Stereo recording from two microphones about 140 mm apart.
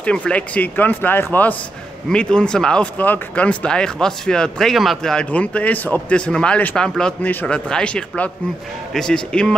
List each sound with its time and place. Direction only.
0.0 s speech: 10° left (ahead or behind)